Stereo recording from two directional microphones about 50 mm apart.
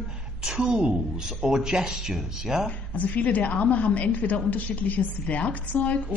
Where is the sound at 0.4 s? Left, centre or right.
Centre.